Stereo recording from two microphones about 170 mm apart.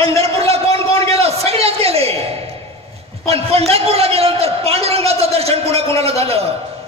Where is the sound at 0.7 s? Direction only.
20° left (ahead or behind).